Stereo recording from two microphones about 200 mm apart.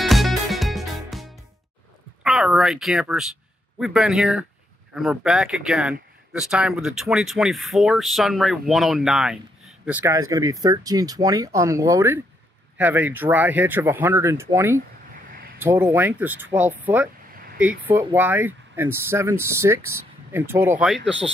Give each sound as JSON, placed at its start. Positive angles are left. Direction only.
{"t": 0.0, "sound": "music", "side_deg": 0}
{"t": 2.2, "sound": "speech", "side_deg": 0}